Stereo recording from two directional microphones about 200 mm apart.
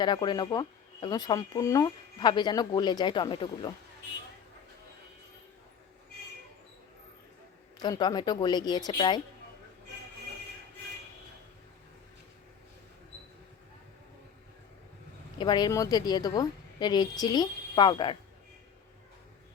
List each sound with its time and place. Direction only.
0.0 s speech: 20° left (ahead or behind)
7.8 s speech: 20° left (ahead or behind)
15.4 s speech: 20° left (ahead or behind)